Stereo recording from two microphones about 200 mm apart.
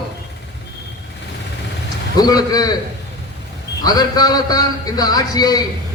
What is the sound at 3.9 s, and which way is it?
A man's voice, 20° left (ahead or behind).